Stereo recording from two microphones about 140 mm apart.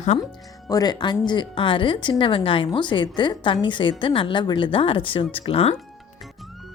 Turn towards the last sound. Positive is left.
turn(degrees=45)  # may be behind; listen again after turning